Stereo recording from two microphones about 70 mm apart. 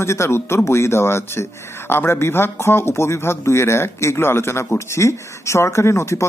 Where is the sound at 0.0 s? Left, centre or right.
Left.